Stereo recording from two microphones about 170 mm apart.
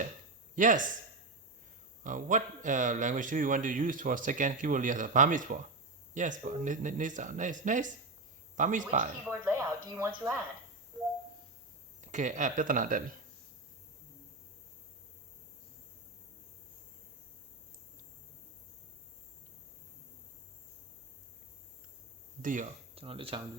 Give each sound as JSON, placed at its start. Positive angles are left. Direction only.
{"t": 0.5, "sound": "speech", "side_deg": -50}
{"t": 2.0, "sound": "speech", "side_deg": -50}
{"t": 9.4, "sound": "speech", "side_deg": -15}
{"t": 11.9, "sound": "speech", "side_deg": -45}
{"t": 22.4, "sound": "speech", "side_deg": -50}
{"t": 23.0, "sound": "speech", "side_deg": -35}